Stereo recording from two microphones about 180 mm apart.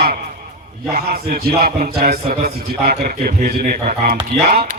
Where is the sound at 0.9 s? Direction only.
55° right (ahead or behind).